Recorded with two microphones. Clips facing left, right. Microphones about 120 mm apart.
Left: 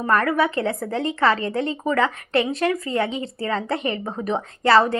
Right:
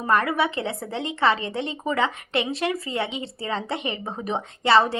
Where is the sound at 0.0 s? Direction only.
15° right (ahead or behind).